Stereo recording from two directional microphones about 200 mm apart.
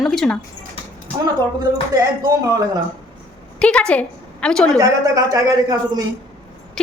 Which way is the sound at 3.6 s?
5° left (ahead or behind).